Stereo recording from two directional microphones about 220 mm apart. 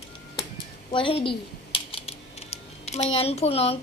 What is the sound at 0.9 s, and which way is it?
Typing, 25° left (ahead or behind).